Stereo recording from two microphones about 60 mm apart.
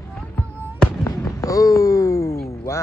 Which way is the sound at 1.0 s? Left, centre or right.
Left.